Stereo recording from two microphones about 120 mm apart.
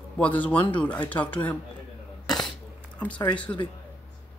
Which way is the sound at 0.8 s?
15° left (ahead or behind).